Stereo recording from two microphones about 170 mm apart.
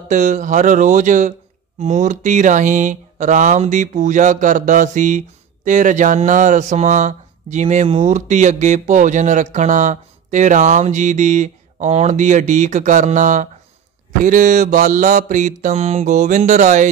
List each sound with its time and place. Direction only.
0.1 s speech: 45° right (ahead or behind)